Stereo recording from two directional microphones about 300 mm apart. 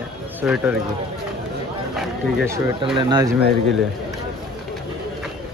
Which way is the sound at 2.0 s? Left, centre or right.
Centre.